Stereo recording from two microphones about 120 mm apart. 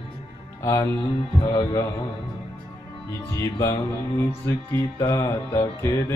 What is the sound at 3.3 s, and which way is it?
Music, 25° left (ahead or behind).